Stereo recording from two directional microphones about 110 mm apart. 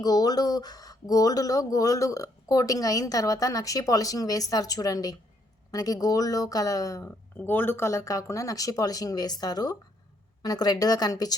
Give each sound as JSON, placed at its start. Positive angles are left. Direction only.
{"t": 0.0, "sound": "speech", "side_deg": 35}
{"t": 7.3, "sound": "speech", "side_deg": 20}